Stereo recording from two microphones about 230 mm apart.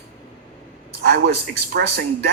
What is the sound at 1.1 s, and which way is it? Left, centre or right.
Speech, right.